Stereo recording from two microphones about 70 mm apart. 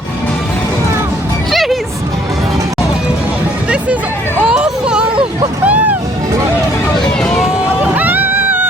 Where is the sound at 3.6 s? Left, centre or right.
Centre.